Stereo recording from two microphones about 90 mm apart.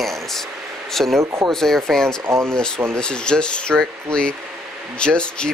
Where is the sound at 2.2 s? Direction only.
30° right (ahead or behind).